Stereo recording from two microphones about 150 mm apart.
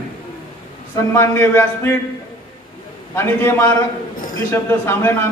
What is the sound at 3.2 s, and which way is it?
A man's voice, 15° left (ahead or behind).